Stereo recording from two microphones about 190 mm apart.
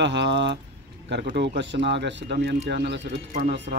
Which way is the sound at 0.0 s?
65° right (ahead or behind).